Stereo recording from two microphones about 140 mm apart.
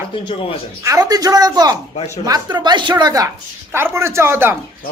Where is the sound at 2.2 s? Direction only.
30° right (ahead or behind).